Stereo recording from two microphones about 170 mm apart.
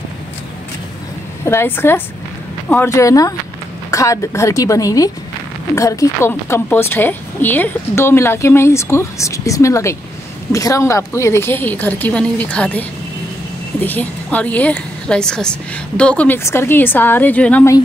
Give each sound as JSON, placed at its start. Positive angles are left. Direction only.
{"t": 1.4, "sound": "speech", "side_deg": 15}